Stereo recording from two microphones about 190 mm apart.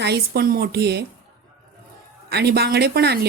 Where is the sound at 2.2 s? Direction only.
60° right (ahead or behind).